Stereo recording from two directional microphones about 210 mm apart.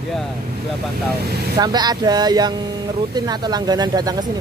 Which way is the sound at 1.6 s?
20° right (ahead or behind).